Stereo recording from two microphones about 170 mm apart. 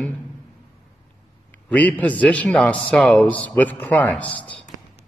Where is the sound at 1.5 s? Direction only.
10° left (ahead or behind).